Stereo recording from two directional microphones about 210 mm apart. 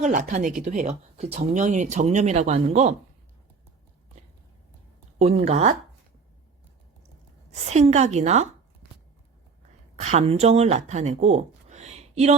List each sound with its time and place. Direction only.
0.0 s speech: 35° right (ahead or behind)
5.2 s speech: 30° right (ahead or behind)
7.7 s speech: 30° right (ahead or behind)
10.0 s speech: 30° right (ahead or behind)